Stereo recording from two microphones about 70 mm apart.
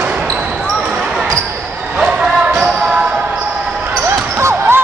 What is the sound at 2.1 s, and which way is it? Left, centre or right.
Basketball bounce, centre.